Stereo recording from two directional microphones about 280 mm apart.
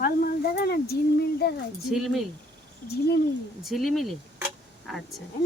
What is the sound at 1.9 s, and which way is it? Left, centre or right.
Speech, centre.